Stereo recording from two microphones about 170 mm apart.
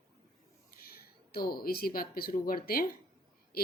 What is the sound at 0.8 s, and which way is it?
Speech, 60° left (ahead or behind).